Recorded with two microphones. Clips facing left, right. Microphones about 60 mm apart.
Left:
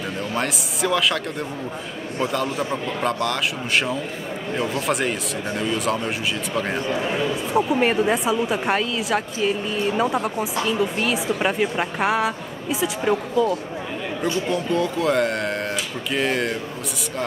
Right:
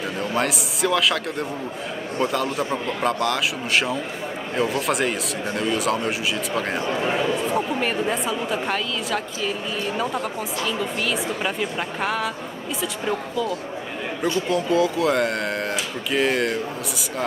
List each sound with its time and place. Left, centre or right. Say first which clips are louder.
0.2 s speech: right 3 dB; centre
7.5 s a woman's voice: left 4 dB; centre
8.7 s a woman's voice: left 3 dB; left
14.2 s speech: right 1 dB; centre